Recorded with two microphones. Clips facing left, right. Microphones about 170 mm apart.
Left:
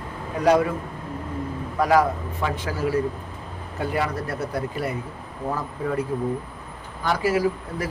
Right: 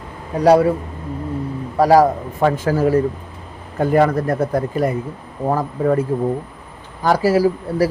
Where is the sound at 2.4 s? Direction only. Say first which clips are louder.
Right 10 dB; 50° right (ahead or behind).